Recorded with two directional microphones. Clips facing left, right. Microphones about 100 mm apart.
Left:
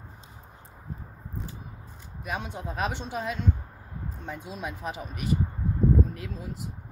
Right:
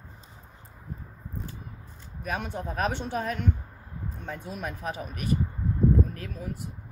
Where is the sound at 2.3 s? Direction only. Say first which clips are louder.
Right 2 dB; 15° left (ahead or behind).